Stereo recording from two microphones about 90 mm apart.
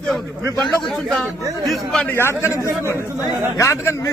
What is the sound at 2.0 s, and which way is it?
Speech, 25° left (ahead or behind).